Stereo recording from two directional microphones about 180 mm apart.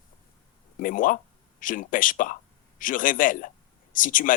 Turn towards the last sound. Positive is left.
turn(degrees=50)  # may be behind; listen again after turning